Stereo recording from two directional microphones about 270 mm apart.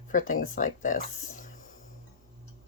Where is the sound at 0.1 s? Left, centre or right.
Left.